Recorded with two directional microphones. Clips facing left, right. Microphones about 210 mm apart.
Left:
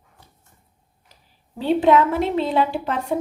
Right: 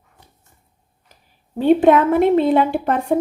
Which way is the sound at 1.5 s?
50° right (ahead or behind).